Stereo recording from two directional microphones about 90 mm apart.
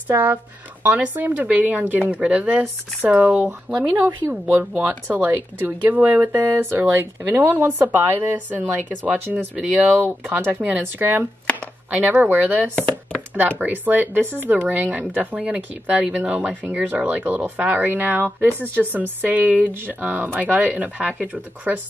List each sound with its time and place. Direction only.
0.1 s speech: 20° right (ahead or behind)